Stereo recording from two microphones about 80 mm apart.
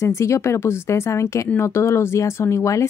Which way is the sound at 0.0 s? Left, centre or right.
Left.